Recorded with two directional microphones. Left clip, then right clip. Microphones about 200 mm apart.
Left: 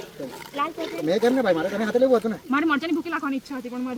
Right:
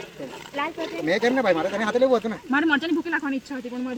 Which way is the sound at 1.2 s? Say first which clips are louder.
Even; 55° left (ahead or behind).